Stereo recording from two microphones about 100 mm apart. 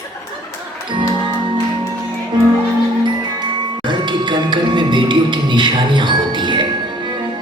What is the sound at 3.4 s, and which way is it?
Music, 50° right (ahead or behind).